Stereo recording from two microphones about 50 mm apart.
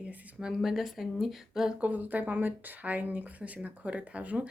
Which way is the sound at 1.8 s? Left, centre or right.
Right.